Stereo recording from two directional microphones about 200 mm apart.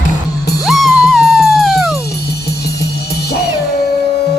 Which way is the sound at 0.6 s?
Centre (ahead or behind).